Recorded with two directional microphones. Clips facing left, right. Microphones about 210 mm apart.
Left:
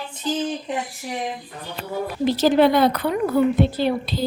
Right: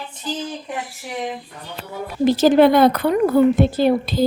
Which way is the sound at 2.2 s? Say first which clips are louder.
Right 4 dB; 50° right (ahead or behind).